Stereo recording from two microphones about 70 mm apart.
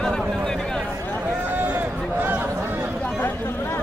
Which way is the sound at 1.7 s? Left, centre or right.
Right.